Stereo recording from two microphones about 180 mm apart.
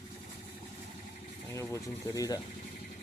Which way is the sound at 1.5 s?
15° left (ahead or behind).